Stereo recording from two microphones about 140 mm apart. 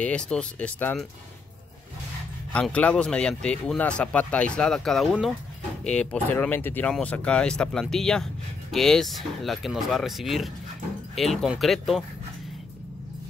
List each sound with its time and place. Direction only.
0.0 s speech: 5° left (ahead or behind)
2.5 s speech: 10° left (ahead or behind)
5.9 s speech: 10° left (ahead or behind)